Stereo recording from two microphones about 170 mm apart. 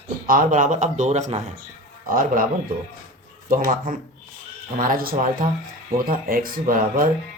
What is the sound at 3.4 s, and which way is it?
Speech, 55° right (ahead or behind).